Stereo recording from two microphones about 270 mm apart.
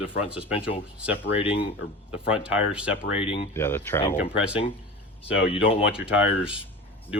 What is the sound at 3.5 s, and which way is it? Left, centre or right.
Speech, centre.